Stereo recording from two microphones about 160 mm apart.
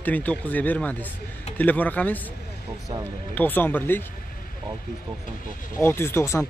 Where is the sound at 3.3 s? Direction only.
10° left (ahead or behind).